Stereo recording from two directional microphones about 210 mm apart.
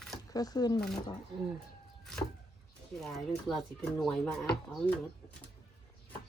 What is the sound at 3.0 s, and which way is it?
Speech, centre (ahead or behind).